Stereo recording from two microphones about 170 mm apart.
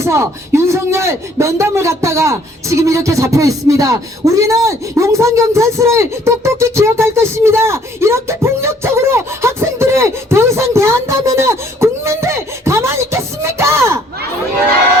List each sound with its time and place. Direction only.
0.0 s speech: 15° right (ahead or behind)